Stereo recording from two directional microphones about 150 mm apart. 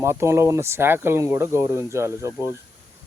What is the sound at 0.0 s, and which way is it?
Speech, 15° right (ahead or behind).